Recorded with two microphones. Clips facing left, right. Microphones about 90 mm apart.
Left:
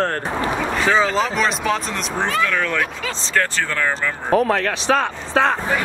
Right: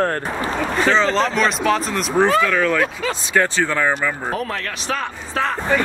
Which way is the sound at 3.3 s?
15° right (ahead or behind).